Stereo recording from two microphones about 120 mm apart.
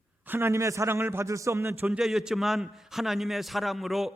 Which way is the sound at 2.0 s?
5° right (ahead or behind).